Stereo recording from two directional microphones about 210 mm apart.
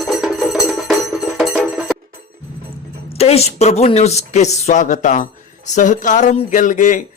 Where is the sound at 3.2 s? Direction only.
30° left (ahead or behind).